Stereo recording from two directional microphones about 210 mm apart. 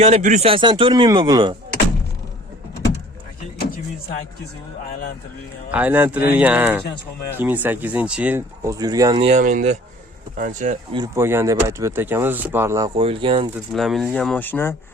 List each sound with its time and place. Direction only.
0.0 s speech: 35° right (ahead or behind)
5.7 s speech: 10° right (ahead or behind)
9.3 s speech: 40° right (ahead or behind)
10.9 s speech: 15° right (ahead or behind)
13.7 s speech: centre (ahead or behind)